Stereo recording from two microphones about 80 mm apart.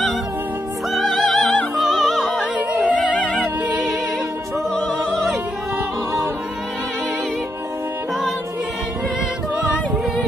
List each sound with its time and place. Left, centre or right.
1.3 s music: centre
1.8 s music: centre
2.9 s music: centre
4.7 s opera: centre